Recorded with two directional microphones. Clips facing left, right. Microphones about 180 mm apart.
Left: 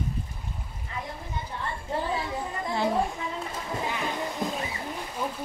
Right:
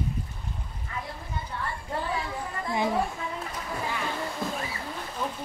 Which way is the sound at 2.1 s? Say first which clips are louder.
Left 2 dB; 20° left (ahead or behind).